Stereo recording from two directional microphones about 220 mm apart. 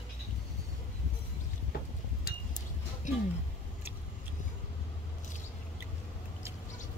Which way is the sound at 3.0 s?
35° left (ahead or behind).